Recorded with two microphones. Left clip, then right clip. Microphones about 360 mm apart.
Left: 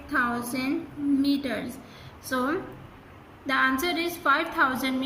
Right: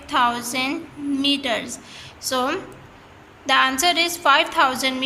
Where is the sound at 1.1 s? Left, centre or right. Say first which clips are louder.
Right 7 dB; right.